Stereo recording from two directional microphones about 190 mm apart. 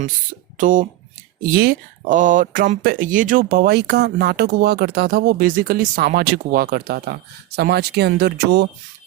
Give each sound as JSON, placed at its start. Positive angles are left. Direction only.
{"t": 0.6, "sound": "speech", "side_deg": -45}